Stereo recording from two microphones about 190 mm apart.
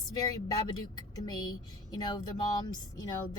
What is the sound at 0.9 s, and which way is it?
Speech, 20° left (ahead or behind).